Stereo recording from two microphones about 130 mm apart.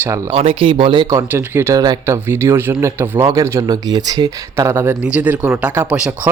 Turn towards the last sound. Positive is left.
turn(degrees=-10)  # may be behind; listen again after turning